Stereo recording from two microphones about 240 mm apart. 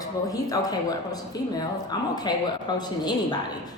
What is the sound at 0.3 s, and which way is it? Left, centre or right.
Speech, centre.